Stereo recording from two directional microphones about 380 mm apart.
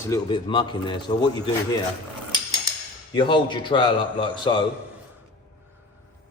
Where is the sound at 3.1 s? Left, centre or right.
Centre.